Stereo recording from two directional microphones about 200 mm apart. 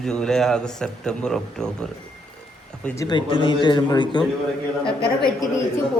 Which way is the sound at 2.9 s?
20° left (ahead or behind).